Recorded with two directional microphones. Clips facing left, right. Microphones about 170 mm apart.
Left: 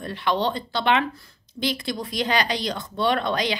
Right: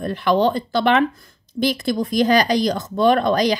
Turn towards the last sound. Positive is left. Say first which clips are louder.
# right 7 dB
turn(degrees=-45)  # may be behind; listen again after turning